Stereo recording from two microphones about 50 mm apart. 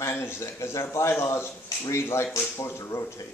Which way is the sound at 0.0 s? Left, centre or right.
Left.